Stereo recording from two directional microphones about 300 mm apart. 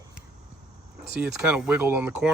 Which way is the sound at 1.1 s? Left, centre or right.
Centre.